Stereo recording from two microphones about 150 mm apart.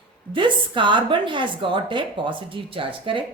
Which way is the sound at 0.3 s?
35° right (ahead or behind).